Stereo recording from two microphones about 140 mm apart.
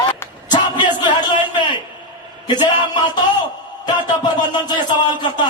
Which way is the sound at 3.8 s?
30° left (ahead or behind).